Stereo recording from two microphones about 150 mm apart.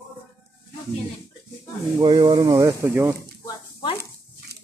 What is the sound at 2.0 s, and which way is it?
Speech, 30° right (ahead or behind).